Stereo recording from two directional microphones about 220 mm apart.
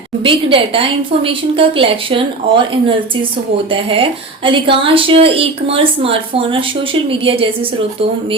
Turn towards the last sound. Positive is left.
turn(degrees=-25)  # may be behind; listen again after turning